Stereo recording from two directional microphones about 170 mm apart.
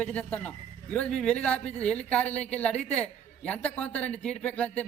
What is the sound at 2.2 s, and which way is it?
Speech, 40° left (ahead or behind).